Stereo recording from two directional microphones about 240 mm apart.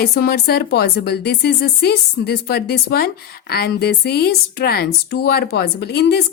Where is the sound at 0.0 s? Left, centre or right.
Left.